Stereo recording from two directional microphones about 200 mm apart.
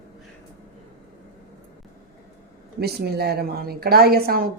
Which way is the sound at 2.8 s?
55° right (ahead or behind).